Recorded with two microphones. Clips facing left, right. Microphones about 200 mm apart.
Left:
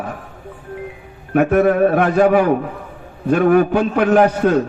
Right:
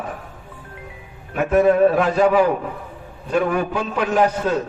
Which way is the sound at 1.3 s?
60° left (ahead or behind).